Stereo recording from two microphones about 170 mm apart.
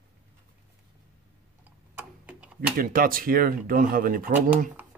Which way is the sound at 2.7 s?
55° right (ahead or behind).